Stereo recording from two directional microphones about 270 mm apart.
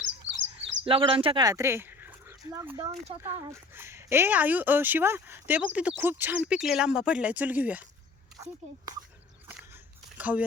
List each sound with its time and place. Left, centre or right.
0.0 s a sound: right
0.9 s speech: centre
10.2 s speech: centre